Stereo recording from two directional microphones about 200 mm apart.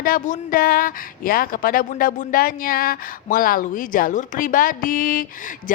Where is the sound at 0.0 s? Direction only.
45° left (ahead or behind).